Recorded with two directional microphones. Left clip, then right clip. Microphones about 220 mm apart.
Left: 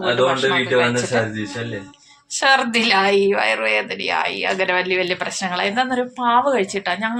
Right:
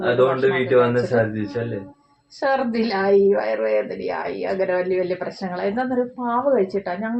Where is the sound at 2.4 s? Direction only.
15° left (ahead or behind).